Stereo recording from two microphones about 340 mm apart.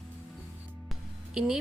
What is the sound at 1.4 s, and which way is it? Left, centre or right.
Speech, centre.